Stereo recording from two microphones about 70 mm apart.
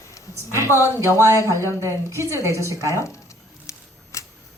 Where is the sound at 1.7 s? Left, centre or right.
Right.